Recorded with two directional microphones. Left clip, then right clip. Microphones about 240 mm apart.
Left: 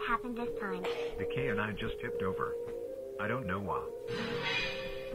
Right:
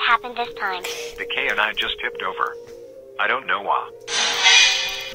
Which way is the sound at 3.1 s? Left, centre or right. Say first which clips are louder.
Right 16 dB; right.